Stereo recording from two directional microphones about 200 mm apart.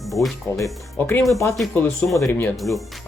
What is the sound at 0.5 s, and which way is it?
Speech, 15° left (ahead or behind).